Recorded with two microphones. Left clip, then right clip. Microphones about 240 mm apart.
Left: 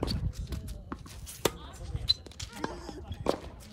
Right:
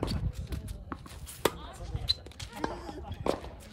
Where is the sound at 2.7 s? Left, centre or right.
Centre.